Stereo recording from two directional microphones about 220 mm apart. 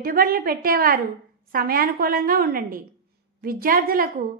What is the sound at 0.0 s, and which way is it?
A woman's voice, 40° right (ahead or behind).